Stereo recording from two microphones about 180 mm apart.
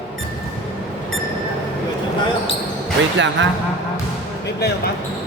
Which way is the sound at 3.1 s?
90° right.